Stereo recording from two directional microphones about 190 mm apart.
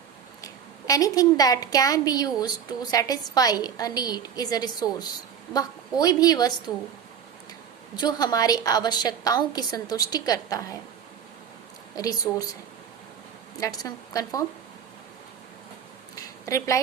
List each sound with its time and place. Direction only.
0.4 s a woman's voice: 20° left (ahead or behind)
7.9 s a woman's voice: 20° left (ahead or behind)
11.9 s a woman's voice: 20° left (ahead or behind)
13.6 s a woman's voice: 20° left (ahead or behind)
16.1 s a sound: 15° left (ahead or behind)